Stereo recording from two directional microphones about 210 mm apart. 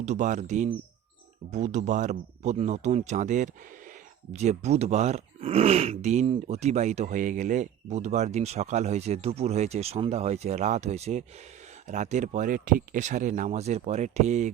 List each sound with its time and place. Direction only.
0.0 s speech: 35° right (ahead or behind)